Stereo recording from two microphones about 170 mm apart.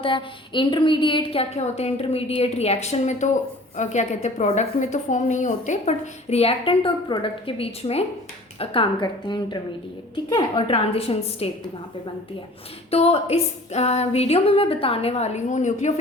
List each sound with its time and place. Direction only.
0.0 s a woman's voice: 30° left (ahead or behind); by 5.9 s 45° left (ahead or behind)
6.3 s a woman's voice: 35° left (ahead or behind)
12.9 s a woman's voice: 35° left (ahead or behind)